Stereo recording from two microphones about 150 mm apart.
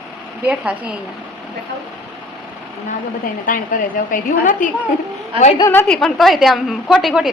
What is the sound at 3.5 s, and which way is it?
A woman's voice, 65° left (ahead or behind).